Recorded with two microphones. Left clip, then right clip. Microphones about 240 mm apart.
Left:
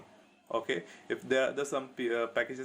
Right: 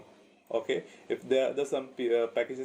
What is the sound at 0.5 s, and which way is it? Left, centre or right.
Speech, left.